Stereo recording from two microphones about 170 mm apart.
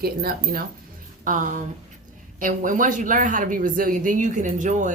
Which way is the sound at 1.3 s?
50° right (ahead or behind).